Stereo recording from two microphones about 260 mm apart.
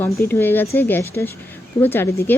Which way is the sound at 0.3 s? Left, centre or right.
Centre.